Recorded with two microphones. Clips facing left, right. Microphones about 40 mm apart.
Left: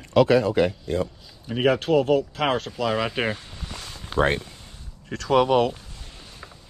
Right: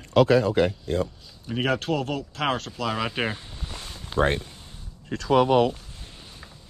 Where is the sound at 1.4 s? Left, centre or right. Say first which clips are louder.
Left 4 dB; centre.